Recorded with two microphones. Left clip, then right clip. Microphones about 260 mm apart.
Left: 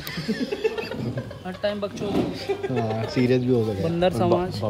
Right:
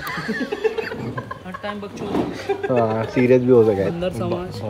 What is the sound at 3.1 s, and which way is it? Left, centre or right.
Speech, centre.